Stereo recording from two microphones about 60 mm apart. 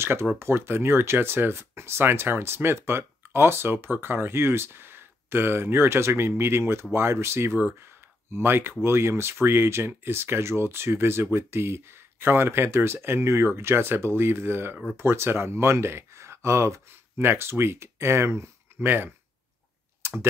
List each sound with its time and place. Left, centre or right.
0.0 s speech: right
17.3 s speech: right